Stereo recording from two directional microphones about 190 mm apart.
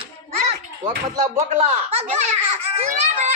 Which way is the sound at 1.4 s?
35° right (ahead or behind).